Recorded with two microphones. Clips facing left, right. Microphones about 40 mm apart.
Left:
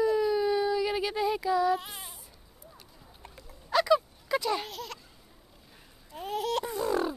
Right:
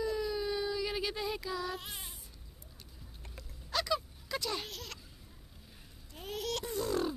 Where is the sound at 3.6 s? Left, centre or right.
Centre.